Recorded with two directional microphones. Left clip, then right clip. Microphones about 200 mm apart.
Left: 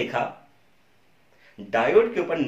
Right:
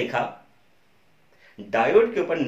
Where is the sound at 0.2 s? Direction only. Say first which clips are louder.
Right 1 dB; 20° right (ahead or behind).